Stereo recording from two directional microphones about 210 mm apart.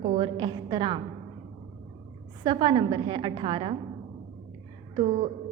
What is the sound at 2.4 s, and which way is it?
A woman's voice, 20° right (ahead or behind).